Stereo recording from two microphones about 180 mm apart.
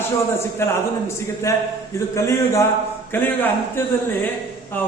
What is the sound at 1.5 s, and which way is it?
Speech, 15° left (ahead or behind).